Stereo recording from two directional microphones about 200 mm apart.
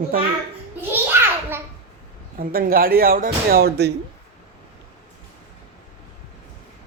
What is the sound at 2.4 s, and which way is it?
Speech, 45° right (ahead or behind).